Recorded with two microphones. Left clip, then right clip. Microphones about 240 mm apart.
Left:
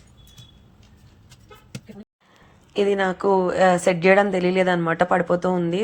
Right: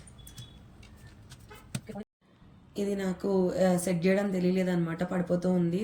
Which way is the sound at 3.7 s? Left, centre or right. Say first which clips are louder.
Left 12 dB; centre.